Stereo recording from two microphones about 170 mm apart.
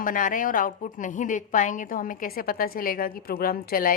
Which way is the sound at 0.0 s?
50° left (ahead or behind).